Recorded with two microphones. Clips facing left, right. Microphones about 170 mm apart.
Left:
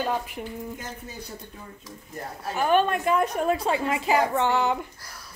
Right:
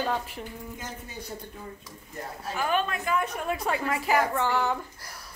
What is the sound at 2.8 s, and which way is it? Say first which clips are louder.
Speech: left 5 dB; 35° left (ahead or behind).